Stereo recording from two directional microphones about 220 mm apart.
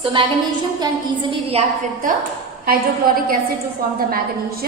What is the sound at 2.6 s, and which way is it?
A woman's voice, 40° right (ahead or behind).